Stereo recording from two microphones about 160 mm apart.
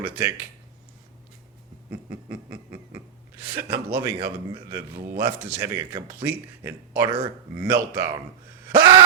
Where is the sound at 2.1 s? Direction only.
20° right (ahead or behind).